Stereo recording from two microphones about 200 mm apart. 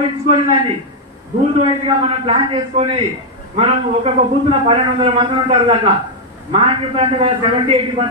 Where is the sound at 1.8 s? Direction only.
30° right (ahead or behind).